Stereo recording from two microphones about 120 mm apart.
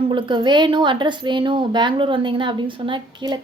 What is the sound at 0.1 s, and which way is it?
A woman's voice, 40° right (ahead or behind).